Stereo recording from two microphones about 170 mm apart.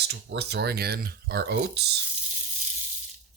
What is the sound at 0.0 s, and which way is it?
Speech, 75° right (ahead or behind).